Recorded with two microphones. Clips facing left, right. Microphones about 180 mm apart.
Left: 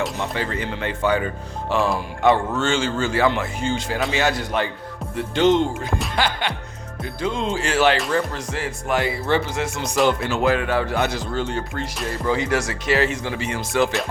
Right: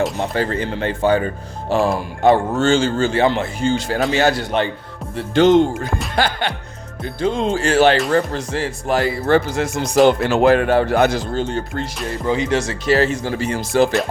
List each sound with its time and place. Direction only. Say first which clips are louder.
0.2 s speech: right 5 dB; 40° right (ahead or behind)
10.2 s speech: right 6 dB; 65° right (ahead or behind); by 11.5 s 40° right (ahead or behind)
12.2 s speech: right 3 dB; 20° right (ahead or behind); by 13.9 s 35° right (ahead or behind)